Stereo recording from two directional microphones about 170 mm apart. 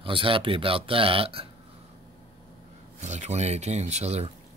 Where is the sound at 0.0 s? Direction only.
30° right (ahead or behind).